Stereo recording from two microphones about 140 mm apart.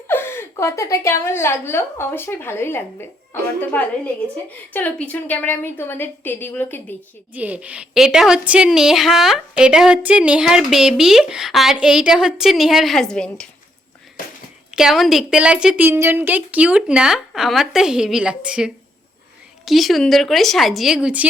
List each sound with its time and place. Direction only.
0.1 s a woman's voice: 15° left (ahead or behind)
7.3 s a woman's voice: 10° right (ahead or behind); by 13.5 s 5° left (ahead or behind)
14.8 s a woman's voice: centre (ahead or behind)